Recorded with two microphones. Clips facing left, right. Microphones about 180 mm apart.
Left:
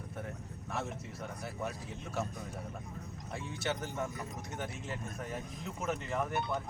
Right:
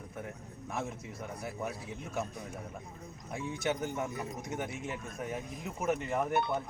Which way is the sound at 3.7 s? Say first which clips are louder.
Right 3 dB; 15° right (ahead or behind).